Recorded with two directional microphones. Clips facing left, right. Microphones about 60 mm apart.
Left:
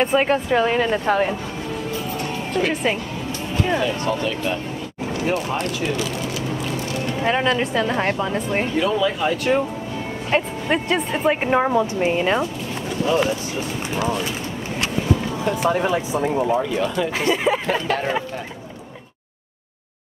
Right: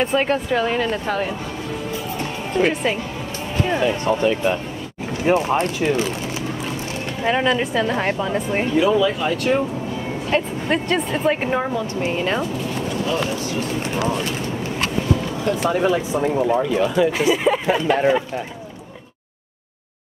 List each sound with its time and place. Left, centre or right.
0.0 s speech: centre
2.7 s a woman's voice: centre
3.8 s speech: right
7.2 s a woman's voice: centre
11.5 s speech: centre
15.4 s a woman's voice: centre